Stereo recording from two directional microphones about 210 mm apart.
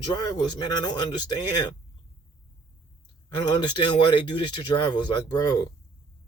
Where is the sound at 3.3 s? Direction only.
20° left (ahead or behind).